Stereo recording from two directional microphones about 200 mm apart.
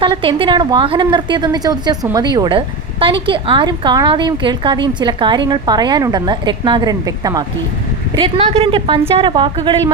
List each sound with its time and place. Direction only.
0.0 s speech: 25° right (ahead or behind)